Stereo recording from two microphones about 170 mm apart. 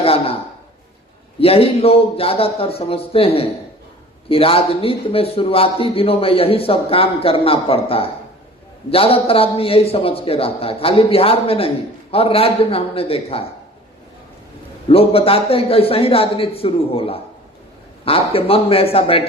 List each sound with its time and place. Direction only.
0.0 s a sound: 35° left (ahead or behind)
1.4 s a man's voice: 35° left (ahead or behind)
14.8 s a man's voice: 35° left (ahead or behind)